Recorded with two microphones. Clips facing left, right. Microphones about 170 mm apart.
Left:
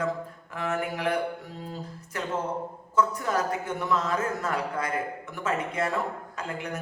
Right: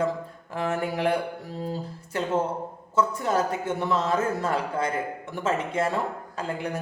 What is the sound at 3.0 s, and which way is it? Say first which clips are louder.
Speech: right 2 dB; 25° right (ahead or behind).